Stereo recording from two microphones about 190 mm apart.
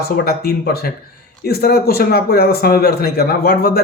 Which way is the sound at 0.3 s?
55° left (ahead or behind).